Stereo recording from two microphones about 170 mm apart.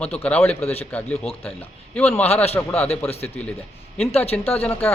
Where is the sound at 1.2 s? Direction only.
35° left (ahead or behind).